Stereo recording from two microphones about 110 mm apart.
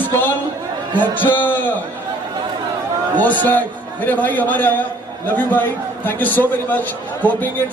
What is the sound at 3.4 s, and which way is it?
A man's voice, 15° left (ahead or behind).